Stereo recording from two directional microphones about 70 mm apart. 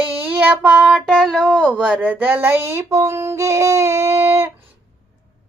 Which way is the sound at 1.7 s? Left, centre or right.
Centre.